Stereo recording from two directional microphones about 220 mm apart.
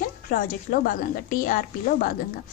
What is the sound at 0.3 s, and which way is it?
A woman's voice, 40° left (ahead or behind).